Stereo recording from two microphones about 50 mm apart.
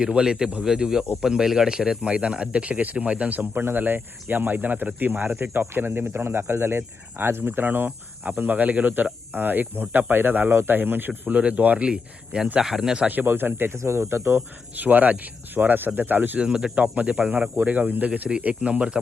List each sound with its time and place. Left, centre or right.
0.0 s speech: centre
3.5 s speech: right
11.9 s speech: centre
13.2 s speech: right
13.7 s speech: right
14.3 s speech: right
16.4 s speech: centre
16.7 s speech: right
17.6 s speech: right